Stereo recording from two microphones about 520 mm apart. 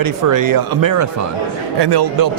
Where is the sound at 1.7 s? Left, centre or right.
Right.